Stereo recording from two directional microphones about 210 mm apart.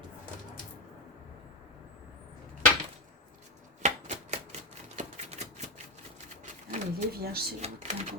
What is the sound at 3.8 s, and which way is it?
Typewriter, 35° right (ahead or behind).